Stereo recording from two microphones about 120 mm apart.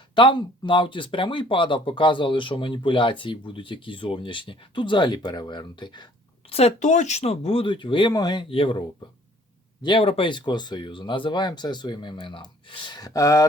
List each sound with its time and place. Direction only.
0.1 s speech: 45° left (ahead or behind)
6.5 s speech: 60° left (ahead or behind)
9.8 s speech: 50° left (ahead or behind); by 13.5 s 30° left (ahead or behind)